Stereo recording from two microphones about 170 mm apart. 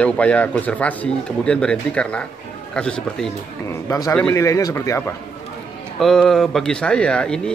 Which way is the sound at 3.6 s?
20° left (ahead or behind).